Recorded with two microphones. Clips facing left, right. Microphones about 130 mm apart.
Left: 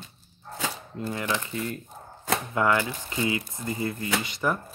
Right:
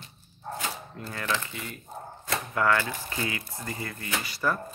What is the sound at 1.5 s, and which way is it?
Speech, 40° left (ahead or behind).